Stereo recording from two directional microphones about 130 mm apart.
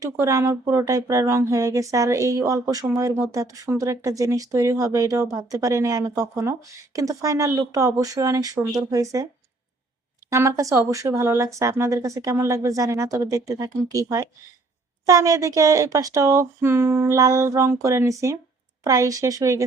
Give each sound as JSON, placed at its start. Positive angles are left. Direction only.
{"t": 0.0, "sound": "speech", "side_deg": -25}
{"t": 10.2, "sound": "speech", "side_deg": -25}